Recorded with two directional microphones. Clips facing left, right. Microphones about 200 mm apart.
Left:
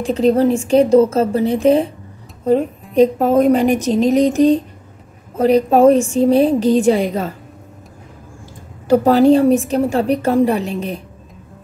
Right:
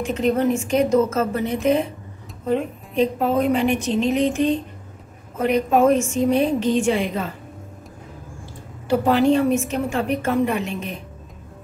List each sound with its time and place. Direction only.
0.0 s a woman's voice: 35° left (ahead or behind)
3.0 s a woman's voice: 45° left (ahead or behind)
8.8 s a woman's voice: 40° left (ahead or behind)